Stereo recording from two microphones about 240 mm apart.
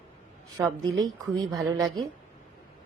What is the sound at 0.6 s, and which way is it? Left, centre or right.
Speech, centre.